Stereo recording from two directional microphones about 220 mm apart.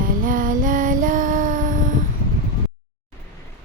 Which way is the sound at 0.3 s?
40° right (ahead or behind).